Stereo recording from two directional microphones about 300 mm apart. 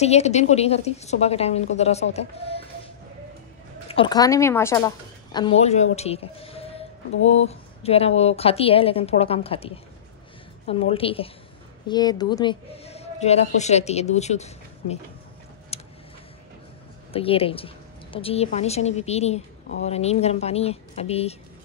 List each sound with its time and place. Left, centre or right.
0.0 s a woman's voice: left
3.9 s a woman's voice: centre
5.9 s a sound: centre
7.2 s a woman's voice: left
15.7 s a sound: centre
17.1 s a woman's voice: centre